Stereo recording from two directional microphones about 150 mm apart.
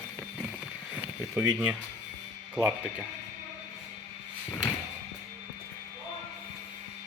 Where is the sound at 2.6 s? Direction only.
10° right (ahead or behind).